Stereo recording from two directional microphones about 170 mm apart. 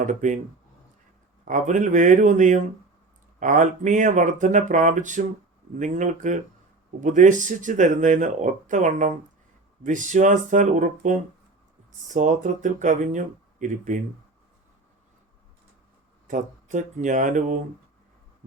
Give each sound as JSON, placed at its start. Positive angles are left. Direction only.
{"t": 0.0, "sound": "speech", "side_deg": -45}
{"t": 1.5, "sound": "speech", "side_deg": -50}
{"t": 16.2, "sound": "speech", "side_deg": -50}